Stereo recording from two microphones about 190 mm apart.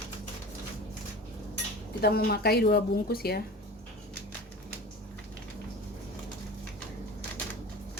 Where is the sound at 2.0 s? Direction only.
55° left (ahead or behind).